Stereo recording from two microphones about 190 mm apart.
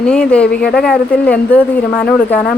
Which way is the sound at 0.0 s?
5° left (ahead or behind).